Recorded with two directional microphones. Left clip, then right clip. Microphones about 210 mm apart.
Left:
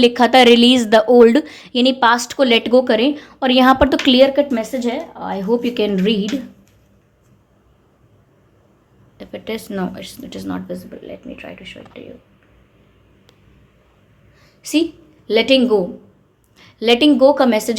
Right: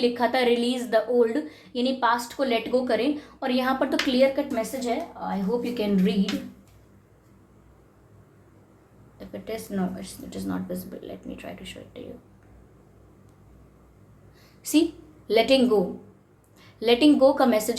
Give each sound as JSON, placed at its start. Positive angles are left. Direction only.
{"t": 0.0, "sound": "a woman's voice", "side_deg": 45}
{"t": 9.1, "sound": "speech", "side_deg": 30}
{"t": 14.6, "sound": "a woman's voice", "side_deg": 20}